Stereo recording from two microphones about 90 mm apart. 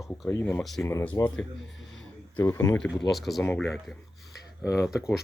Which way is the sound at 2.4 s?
30° left (ahead or behind).